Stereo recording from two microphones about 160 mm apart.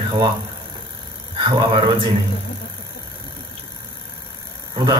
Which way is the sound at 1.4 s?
30° right (ahead or behind).